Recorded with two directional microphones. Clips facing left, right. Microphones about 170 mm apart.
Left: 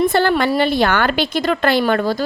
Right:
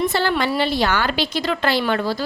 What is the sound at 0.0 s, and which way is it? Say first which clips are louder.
A woman's voice: left 5 dB; 55° left (ahead or behind).